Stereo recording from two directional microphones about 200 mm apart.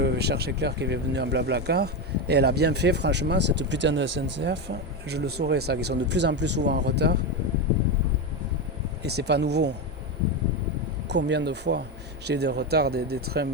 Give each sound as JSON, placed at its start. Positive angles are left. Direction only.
{"t": 0.0, "sound": "speech", "side_deg": -55}
{"t": 9.0, "sound": "speech", "side_deg": -55}
{"t": 11.1, "sound": "speech", "side_deg": -60}